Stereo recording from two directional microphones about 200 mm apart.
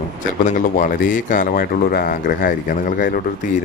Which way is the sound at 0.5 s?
45° left (ahead or behind).